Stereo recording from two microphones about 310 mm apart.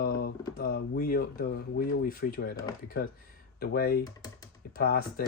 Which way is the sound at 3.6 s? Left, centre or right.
Left.